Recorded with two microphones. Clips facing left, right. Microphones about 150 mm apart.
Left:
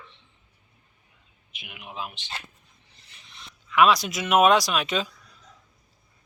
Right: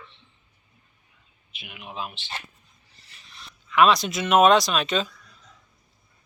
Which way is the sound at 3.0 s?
20° left (ahead or behind).